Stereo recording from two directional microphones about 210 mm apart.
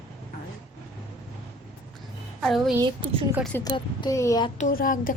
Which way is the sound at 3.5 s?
20° left (ahead or behind).